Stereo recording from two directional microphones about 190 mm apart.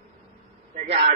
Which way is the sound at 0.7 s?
40° right (ahead or behind).